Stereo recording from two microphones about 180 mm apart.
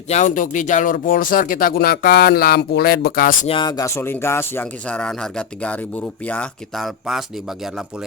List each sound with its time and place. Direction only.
0.1 s speech: 45° left (ahead or behind)
3.4 s speech: 30° left (ahead or behind); by 7.9 s centre (ahead or behind)